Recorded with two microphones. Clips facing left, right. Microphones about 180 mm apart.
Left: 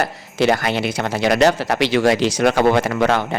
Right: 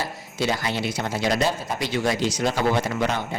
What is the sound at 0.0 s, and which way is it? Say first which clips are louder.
Speech: left 8 dB; 75° left (ahead or behind).